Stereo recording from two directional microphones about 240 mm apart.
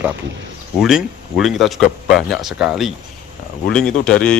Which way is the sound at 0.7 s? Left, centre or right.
Centre.